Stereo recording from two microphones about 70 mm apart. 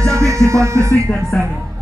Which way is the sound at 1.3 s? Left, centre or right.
Left.